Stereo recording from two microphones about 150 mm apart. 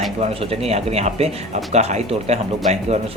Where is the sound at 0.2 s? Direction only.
45° right (ahead or behind).